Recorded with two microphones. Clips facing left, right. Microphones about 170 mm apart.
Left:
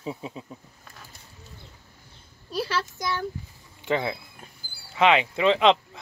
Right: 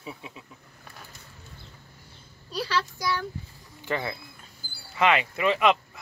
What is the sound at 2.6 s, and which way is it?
A child's voice, 25° left (ahead or behind).